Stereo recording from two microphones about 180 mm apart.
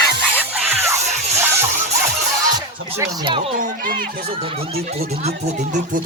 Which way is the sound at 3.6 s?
55° right (ahead or behind).